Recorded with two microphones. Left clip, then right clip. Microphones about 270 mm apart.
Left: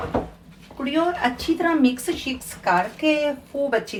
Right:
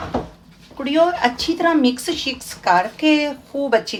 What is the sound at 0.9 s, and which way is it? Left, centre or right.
Speech, right.